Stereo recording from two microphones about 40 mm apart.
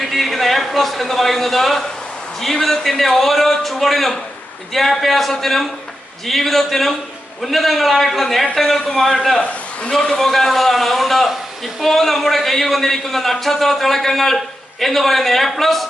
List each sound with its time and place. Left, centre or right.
0.0 s a man's voice: centre
9.9 s a man's voice: centre
10.2 s a man's voice: centre